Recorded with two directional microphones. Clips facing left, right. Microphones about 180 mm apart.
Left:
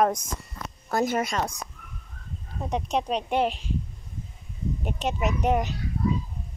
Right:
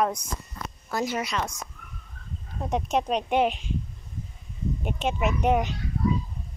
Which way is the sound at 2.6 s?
Centre (ahead or behind).